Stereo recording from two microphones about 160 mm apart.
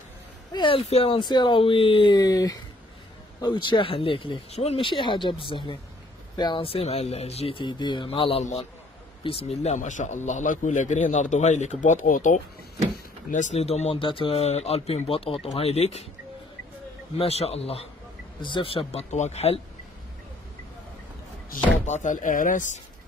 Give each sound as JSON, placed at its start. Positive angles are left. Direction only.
{"t": 0.5, "sound": "a man's voice", "side_deg": 30}
{"t": 17.2, "sound": "speech", "side_deg": 40}
{"t": 21.5, "sound": "a man's voice", "side_deg": 50}